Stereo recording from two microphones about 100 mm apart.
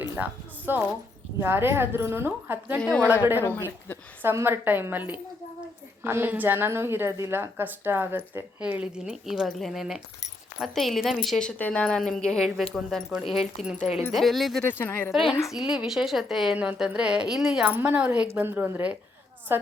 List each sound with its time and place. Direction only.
0.2 s music: 20° right (ahead or behind)
1.4 s a woman's voice: 25° right (ahead or behind)
2.8 s a woman's voice: 15° left (ahead or behind)
4.2 s a woman's voice: 20° right (ahead or behind)
8.6 s speech: 10° right (ahead or behind)
14.6 s speech: 20° left (ahead or behind)
15.5 s a woman's voice: 5° right (ahead or behind)
17.7 s a woman's voice: 20° right (ahead or behind)